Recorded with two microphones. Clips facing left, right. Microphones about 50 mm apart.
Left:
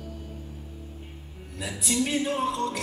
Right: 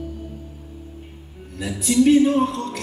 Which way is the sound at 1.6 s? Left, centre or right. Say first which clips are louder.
Right 9 dB; centre.